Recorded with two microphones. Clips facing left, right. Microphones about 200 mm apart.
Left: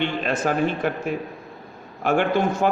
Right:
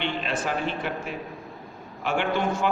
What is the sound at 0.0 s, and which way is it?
A man's voice, 45° left (ahead or behind).